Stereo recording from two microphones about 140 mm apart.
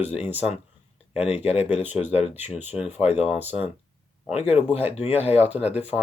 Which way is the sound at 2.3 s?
10° right (ahead or behind).